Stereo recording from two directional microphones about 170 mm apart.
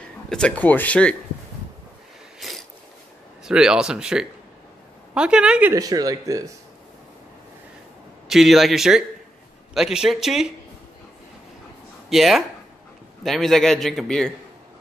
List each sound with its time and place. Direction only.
0.3 s speech: 5° left (ahead or behind)
2.4 s a sound: centre (ahead or behind)
3.4 s a man's voice: 5° right (ahead or behind)
5.8 s speech: 20° right (ahead or behind)
8.3 s a man's voice: centre (ahead or behind)
12.1 s a man's voice: centre (ahead or behind)